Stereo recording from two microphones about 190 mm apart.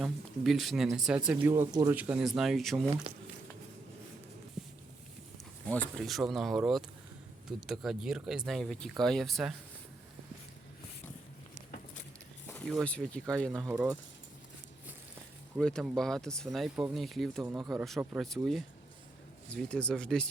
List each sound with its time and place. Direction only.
0.0 s speech: centre (ahead or behind); by 2.0 s 15° right (ahead or behind)
2.0 s speech: 5° right (ahead or behind)
5.6 s speech: 5° left (ahead or behind)
12.5 s speech: 5° left (ahead or behind)
15.5 s speech: centre (ahead or behind)
17.4 s speech: 20° right (ahead or behind)
17.7 s speech: centre (ahead or behind)